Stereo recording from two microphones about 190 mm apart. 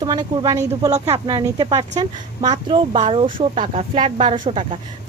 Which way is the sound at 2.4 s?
35° right (ahead or behind).